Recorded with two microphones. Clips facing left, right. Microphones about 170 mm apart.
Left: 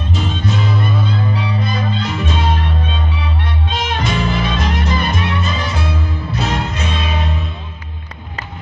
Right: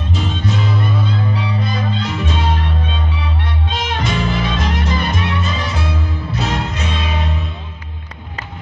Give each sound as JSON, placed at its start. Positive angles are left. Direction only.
{"t": 1.3, "sound": "music", "side_deg": 55}
{"t": 3.8, "sound": "music", "side_deg": 60}